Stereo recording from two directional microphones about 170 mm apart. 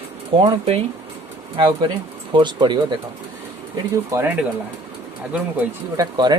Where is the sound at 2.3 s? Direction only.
25° right (ahead or behind).